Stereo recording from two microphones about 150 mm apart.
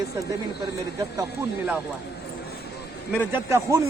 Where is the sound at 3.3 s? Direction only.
20° right (ahead or behind).